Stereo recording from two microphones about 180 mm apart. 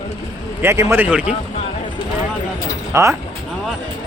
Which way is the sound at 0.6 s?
15° right (ahead or behind).